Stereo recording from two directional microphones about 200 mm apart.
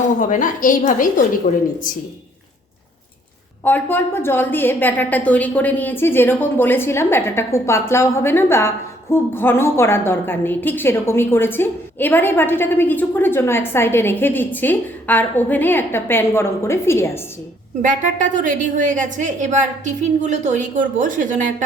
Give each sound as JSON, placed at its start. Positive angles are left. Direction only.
{"t": 0.2, "sound": "a woman's voice", "side_deg": 40}
{"t": 3.6, "sound": "a woman's voice", "side_deg": 10}
{"t": 17.8, "sound": "a woman's voice", "side_deg": -40}